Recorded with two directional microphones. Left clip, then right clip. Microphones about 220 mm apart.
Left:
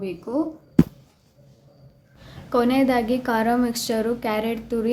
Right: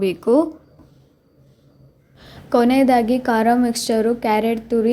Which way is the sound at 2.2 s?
25° right (ahead or behind).